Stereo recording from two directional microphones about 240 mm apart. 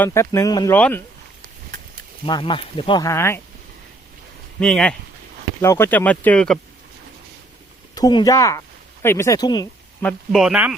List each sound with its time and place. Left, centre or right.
0.0 s speech: centre
2.2 s speech: left
4.6 s speech: centre
7.9 s speech: centre
10.0 s speech: centre